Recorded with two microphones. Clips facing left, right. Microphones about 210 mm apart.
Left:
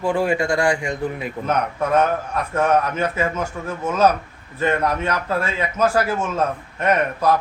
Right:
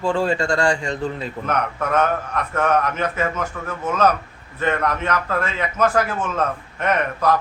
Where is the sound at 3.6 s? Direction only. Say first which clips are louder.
Left 2 dB; 25° left (ahead or behind).